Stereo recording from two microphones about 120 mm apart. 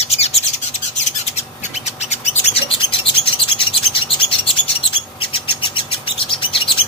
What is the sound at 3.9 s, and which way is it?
Bird, 50° left (ahead or behind).